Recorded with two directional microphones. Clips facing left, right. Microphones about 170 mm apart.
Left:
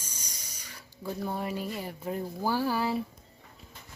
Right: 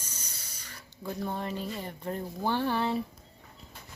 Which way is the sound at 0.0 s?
10° left (ahead or behind).